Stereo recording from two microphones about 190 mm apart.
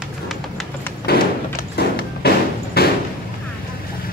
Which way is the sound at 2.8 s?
55° left (ahead or behind).